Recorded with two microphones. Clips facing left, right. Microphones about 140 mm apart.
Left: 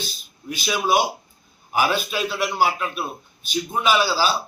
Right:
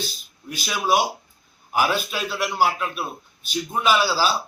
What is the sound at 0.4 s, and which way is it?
A man's voice, 5° left (ahead or behind).